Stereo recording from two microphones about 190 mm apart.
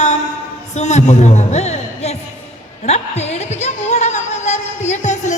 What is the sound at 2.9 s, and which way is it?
Music, 35° left (ahead or behind).